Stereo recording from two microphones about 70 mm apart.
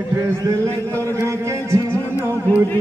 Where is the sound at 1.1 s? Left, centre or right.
Right.